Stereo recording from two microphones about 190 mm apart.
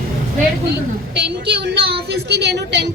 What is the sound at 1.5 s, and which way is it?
A woman's voice, 60° right (ahead or behind).